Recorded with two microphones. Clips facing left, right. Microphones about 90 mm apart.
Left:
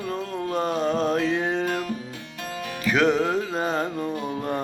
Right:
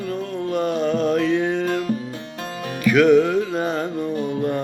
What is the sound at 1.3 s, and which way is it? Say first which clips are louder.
Music: right 4 dB; 30° left (ahead or behind).